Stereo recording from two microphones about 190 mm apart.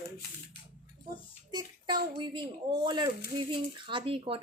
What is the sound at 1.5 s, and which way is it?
A woman's voice, 20° right (ahead or behind).